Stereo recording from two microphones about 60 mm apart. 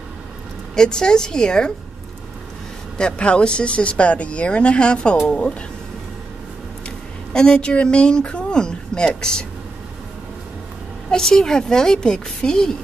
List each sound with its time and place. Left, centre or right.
0.7 s a woman's voice: centre
3.0 s speech: centre
7.3 s speech: centre
11.1 s a woman's voice: centre